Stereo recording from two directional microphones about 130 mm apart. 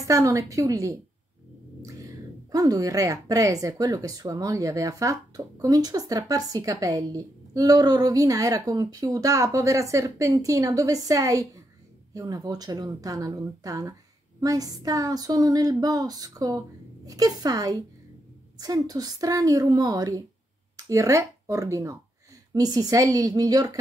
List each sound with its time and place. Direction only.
0.0 s speech: 25° right (ahead or behind)
1.8 s a sound: 25° right (ahead or behind)
2.5 s speech: 25° right (ahead or behind)